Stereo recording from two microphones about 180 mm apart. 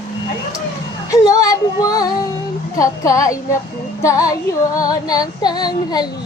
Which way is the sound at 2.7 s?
20° left (ahead or behind).